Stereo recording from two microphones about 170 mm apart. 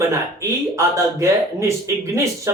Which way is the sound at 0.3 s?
20° right (ahead or behind).